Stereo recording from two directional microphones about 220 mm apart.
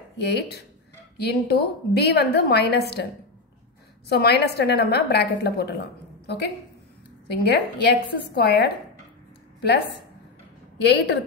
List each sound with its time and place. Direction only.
0.2 s a woman's voice: 50° left (ahead or behind)
4.1 s a woman's voice: 45° left (ahead or behind)
10.8 s a woman's voice: 50° left (ahead or behind)